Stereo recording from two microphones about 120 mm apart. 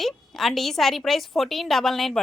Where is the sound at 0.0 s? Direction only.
Centre (ahead or behind).